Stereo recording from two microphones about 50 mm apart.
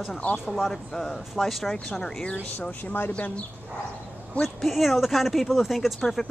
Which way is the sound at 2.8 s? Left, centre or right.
Left.